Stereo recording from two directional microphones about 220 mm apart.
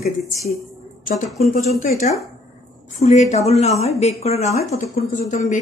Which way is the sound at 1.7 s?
35° left (ahead or behind).